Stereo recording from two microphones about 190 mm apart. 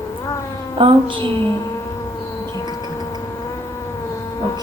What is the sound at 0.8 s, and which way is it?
Speech, 25° right (ahead or behind).